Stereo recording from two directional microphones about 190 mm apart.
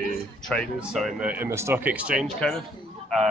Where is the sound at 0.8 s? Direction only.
Centre (ahead or behind).